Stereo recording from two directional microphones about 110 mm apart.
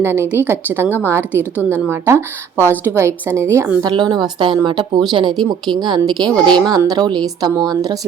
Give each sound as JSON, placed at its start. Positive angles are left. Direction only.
{"t": 0.0, "sound": "a woman's voice", "side_deg": -20}
{"t": 3.8, "sound": "a woman's voice", "side_deg": -45}